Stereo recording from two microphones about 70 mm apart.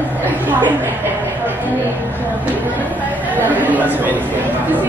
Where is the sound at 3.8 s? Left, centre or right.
Right.